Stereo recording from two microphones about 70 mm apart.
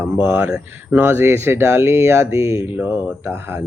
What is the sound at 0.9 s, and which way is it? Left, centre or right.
Speech, right.